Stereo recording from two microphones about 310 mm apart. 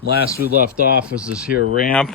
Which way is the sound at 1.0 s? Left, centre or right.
Centre.